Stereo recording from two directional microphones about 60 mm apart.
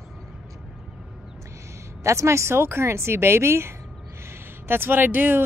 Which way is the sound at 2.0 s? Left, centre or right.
Right.